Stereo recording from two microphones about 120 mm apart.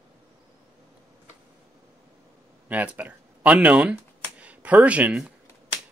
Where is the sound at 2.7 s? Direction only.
15° right (ahead or behind).